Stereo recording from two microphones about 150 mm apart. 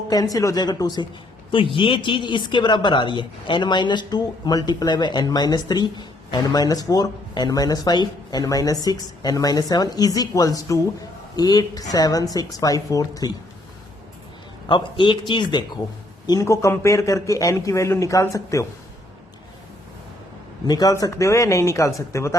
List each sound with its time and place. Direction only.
0.1 s speech: 25° left (ahead or behind)
14.7 s a man's voice: 35° left (ahead or behind)
20.7 s speech: 25° left (ahead or behind)